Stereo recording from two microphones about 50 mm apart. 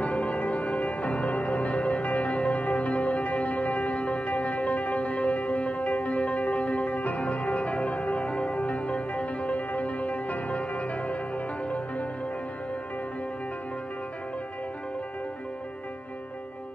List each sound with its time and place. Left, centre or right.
0.0 s music: left